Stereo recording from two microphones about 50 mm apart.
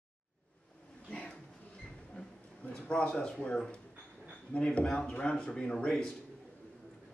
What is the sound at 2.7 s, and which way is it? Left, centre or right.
Speech, left.